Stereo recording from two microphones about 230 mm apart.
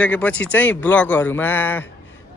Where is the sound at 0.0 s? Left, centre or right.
Centre.